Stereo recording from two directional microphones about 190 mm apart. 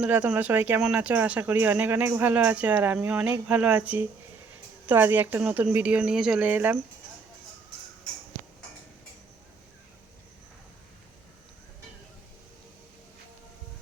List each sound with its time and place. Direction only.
0.0 s speech: 5° right (ahead or behind)